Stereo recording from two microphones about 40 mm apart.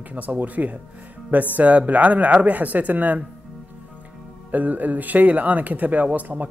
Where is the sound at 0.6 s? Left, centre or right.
Right.